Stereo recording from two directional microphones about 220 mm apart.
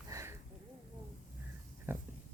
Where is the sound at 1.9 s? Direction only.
10° right (ahead or behind).